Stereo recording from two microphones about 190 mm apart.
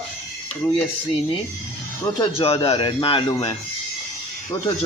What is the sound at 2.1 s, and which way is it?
A man's voice, 25° left (ahead or behind).